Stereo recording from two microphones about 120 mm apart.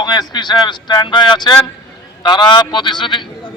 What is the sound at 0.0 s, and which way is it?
A man's voice, 35° left (ahead or behind).